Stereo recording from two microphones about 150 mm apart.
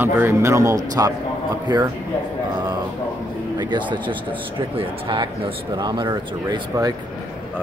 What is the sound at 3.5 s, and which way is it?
Speech, 30° right (ahead or behind).